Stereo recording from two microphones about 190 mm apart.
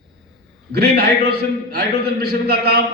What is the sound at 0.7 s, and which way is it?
A man's voice, 55° right (ahead or behind).